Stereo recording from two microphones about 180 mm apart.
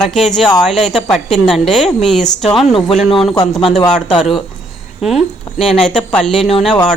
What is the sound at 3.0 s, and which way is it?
Speech, 30° left (ahead or behind).